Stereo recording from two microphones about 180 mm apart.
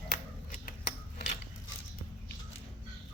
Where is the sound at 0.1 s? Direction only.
50° left (ahead or behind).